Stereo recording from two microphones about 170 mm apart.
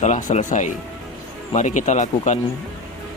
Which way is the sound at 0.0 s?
45° left (ahead or behind).